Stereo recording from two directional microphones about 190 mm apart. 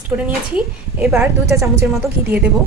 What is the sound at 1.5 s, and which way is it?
Speech, 15° right (ahead or behind).